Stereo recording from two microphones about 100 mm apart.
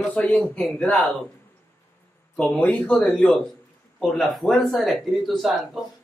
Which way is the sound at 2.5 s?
15° left (ahead or behind).